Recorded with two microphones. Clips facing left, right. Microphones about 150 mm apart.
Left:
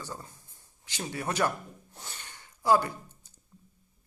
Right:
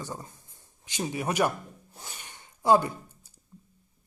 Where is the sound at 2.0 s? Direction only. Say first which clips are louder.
Right 1 dB; 15° right (ahead or behind).